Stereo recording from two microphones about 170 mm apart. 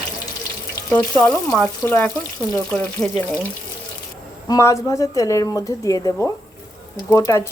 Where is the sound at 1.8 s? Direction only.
15° left (ahead or behind).